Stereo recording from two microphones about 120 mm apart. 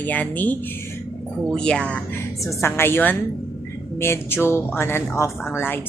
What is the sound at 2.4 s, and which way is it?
Speech, 25° left (ahead or behind).